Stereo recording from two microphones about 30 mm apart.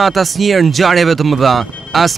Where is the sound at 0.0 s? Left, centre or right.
Centre.